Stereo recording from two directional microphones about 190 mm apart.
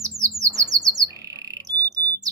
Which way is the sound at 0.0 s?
15° right (ahead or behind).